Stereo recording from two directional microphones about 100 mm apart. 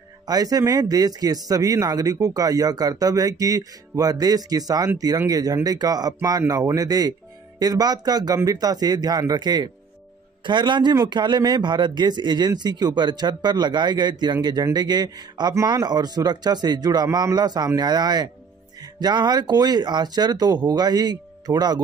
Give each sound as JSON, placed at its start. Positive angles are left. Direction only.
{"t": 0.3, "sound": "speech", "side_deg": -40}